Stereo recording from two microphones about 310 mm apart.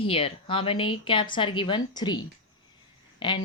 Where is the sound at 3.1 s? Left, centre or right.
Centre.